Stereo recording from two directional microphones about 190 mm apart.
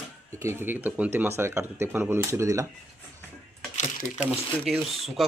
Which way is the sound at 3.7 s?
40° left (ahead or behind).